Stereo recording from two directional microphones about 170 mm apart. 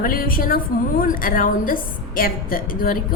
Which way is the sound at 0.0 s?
60° left (ahead or behind).